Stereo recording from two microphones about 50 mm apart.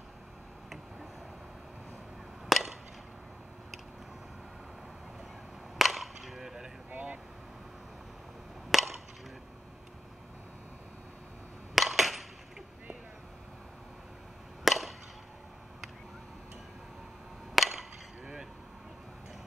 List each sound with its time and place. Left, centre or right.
2.4 s chop: centre
5.8 s a sound: centre
6.9 s air conditioning: right
8.7 s chop: centre
11.7 s a sound: centre
14.6 s chop: centre
17.6 s chop: centre